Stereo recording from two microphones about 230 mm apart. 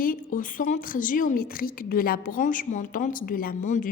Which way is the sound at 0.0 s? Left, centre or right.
Left.